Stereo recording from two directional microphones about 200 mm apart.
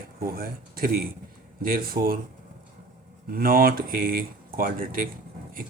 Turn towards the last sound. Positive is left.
turn(degrees=-45)  # may be behind; listen again after turning